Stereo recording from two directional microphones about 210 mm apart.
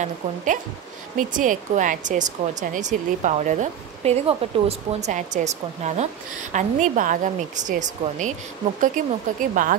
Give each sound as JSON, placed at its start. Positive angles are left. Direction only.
{"t": 1.1, "sound": "speech", "side_deg": -40}